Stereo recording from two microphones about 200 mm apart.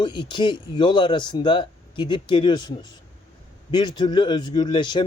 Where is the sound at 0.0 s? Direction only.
25° left (ahead or behind).